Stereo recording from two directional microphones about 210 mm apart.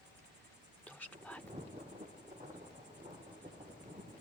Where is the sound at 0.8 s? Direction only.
5° left (ahead or behind).